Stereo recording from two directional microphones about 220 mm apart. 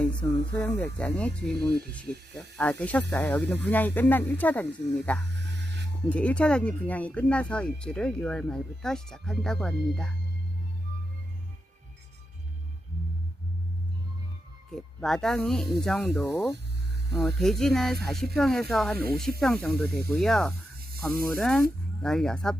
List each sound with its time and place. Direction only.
0.1 s speech: 20° left (ahead or behind)
0.6 s speech: 10° left (ahead or behind)
5.2 s a sound: 50° right (ahead or behind)
6.1 s speech: 5° left (ahead or behind)
14.7 s speech: centre (ahead or behind)
16.3 s speech: 15° left (ahead or behind)
17.1 s speech: centre (ahead or behind)